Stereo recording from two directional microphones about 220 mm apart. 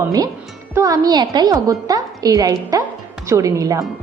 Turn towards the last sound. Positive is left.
turn(degrees=-15)  # may be behind; listen again after turning